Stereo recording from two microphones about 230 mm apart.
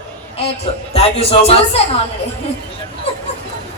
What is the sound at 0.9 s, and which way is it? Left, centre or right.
Speech, left.